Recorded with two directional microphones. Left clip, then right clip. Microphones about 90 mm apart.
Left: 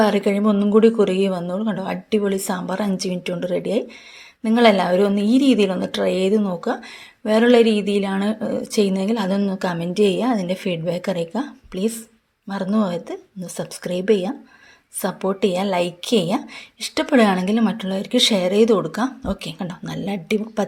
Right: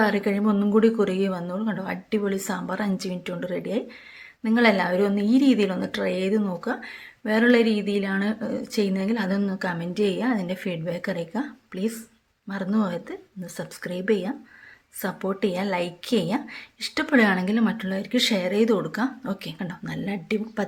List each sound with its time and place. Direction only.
0.0 s speech: 25° left (ahead or behind)
6.4 s speech: 15° left (ahead or behind)